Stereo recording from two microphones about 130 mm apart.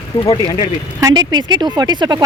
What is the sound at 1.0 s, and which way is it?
Speech, 35° right (ahead or behind).